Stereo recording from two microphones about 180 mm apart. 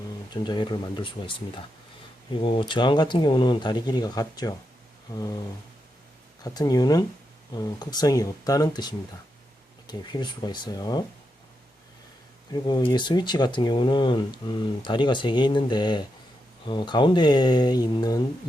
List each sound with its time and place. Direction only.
0.4 s speech: 25° left (ahead or behind)
6.4 s speech: 20° left (ahead or behind)
12.5 s speech: 25° left (ahead or behind)